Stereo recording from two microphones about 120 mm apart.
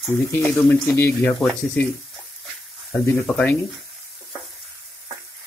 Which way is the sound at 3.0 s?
15° left (ahead or behind).